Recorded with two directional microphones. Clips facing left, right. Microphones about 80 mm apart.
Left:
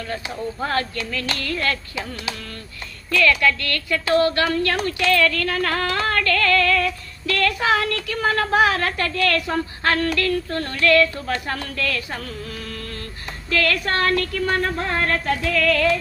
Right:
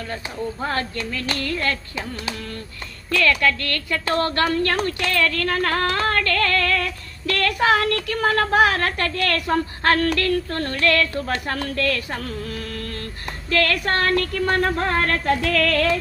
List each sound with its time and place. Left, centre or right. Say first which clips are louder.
0.7 s a woman's voice: left 1 dB; right
13.5 s a woman's voice: right 1 dB; right